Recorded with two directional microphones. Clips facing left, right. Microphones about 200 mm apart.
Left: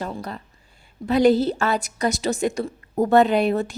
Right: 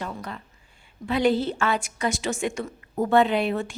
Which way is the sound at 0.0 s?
35° left (ahead or behind).